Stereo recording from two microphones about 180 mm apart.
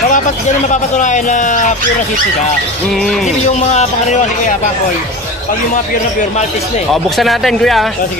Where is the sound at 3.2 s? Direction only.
40° left (ahead or behind).